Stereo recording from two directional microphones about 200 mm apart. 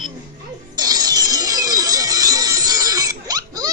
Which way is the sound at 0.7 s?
20° right (ahead or behind).